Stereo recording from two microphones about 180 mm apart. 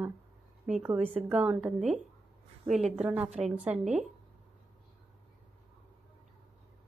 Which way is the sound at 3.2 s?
35° right (ahead or behind).